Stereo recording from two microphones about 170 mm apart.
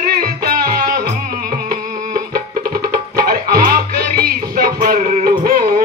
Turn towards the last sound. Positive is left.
turn(degrees=-60)  # may be behind; listen again after turning